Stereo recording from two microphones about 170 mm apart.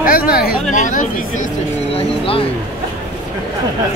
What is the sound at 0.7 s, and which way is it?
Speech, 50° left (ahead or behind).